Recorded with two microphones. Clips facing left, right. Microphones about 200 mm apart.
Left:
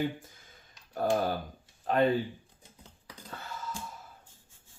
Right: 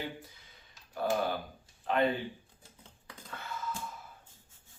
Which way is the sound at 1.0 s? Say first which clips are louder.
Left 3 dB; 45° left (ahead or behind).